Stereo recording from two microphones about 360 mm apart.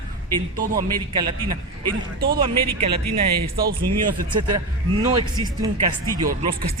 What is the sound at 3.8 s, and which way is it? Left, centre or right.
Speech, right.